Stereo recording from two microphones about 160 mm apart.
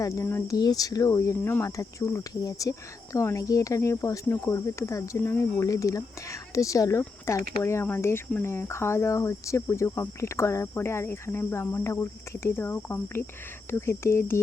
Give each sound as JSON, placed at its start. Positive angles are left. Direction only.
{"t": 0.0, "sound": "speech", "side_deg": 20}